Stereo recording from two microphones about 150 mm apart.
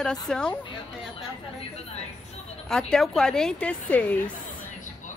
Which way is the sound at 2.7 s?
5° left (ahead or behind).